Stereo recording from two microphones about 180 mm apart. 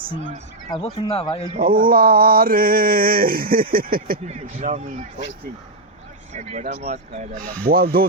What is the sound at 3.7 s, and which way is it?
Speech, 55° right (ahead or behind).